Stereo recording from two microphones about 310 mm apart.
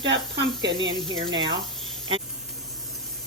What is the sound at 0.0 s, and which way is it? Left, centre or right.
Speech, right.